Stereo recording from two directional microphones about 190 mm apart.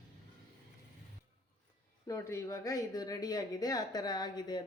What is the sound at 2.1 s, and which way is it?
Speech, 15° left (ahead or behind).